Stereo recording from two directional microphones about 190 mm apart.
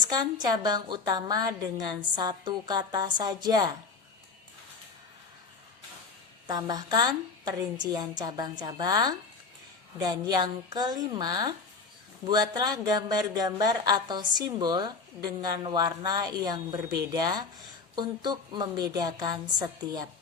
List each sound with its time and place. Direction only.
0.0 s speech: 20° right (ahead or behind)
6.5 s speech: 20° right (ahead or behind)